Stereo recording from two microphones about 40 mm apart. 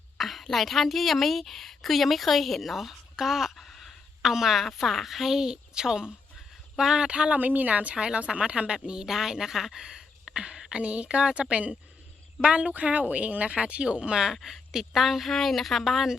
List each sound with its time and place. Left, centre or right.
0.2 s a sound: centre
0.4 s a woman's voice: centre
3.6 s a woman's voice: centre; by 7.3 s right
7.3 s speech: right
7.9 s a woman's voice: right
14.4 s a woman's voice: centre